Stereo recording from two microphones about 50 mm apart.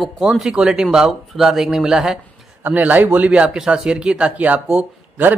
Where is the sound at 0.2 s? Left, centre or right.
Centre.